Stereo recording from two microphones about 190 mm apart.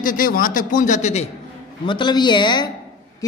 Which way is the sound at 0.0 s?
45° left (ahead or behind).